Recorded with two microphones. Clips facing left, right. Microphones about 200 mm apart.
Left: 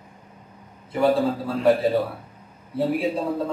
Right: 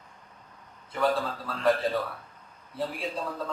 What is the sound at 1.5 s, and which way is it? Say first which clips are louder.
Speech: left 5 dB; 5° left (ahead or behind).